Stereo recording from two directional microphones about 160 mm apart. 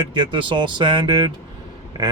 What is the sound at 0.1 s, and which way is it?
Speech, 30° right (ahead or behind).